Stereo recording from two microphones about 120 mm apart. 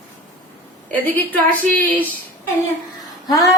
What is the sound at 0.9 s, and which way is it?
Speech, 15° left (ahead or behind).